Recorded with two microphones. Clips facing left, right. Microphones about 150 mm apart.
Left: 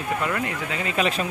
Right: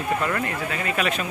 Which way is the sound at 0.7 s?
25° left (ahead or behind).